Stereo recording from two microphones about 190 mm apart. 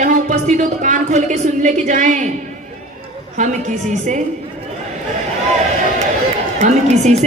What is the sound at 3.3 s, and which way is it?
Speech, 40° right (ahead or behind).